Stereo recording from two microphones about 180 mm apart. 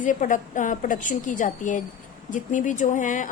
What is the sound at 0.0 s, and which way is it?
A woman's voice, 45° left (ahead or behind).